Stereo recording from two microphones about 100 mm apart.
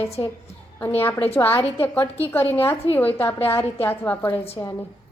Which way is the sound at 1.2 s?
25° left (ahead or behind).